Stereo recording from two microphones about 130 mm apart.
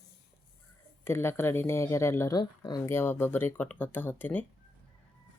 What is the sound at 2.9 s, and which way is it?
Speech, 15° left (ahead or behind).